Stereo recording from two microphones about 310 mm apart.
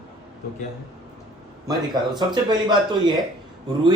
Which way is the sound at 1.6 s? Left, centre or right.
Centre.